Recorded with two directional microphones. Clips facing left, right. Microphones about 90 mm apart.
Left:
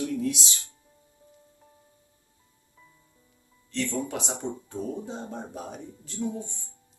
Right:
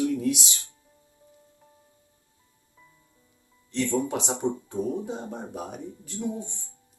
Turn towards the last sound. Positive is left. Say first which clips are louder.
# even
turn(degrees=-20)  # may be behind; listen again after turning